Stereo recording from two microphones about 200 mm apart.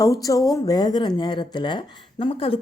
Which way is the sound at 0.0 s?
15° left (ahead or behind).